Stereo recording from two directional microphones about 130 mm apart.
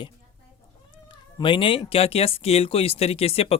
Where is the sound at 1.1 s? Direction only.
35° left (ahead or behind).